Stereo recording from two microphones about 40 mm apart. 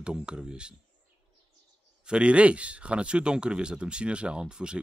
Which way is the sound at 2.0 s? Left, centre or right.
Right.